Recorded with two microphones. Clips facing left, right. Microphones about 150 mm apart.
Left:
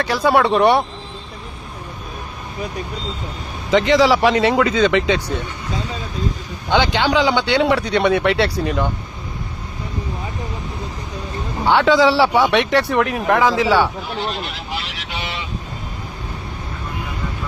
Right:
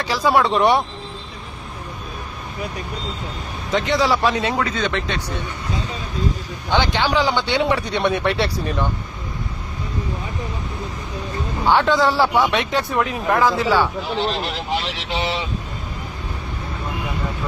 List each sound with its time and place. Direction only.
0.0 s speech: 60° left (ahead or behind)
3.7 s speech: 90° left
6.7 s speech: 85° left
8.2 s speech: centre (ahead or behind)
8.4 s speech: 80° left
11.6 s speech: 80° left
13.5 s speech: 80° left
14.3 s speech: 35° right (ahead or behind)